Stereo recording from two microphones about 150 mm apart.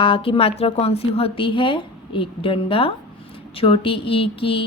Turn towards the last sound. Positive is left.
turn(degrees=35)  # may be behind; listen again after turning